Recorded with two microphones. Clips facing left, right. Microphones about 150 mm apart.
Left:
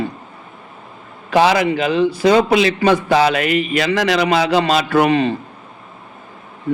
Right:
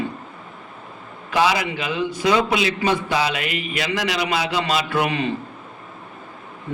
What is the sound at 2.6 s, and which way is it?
Speech, 70° left (ahead or behind).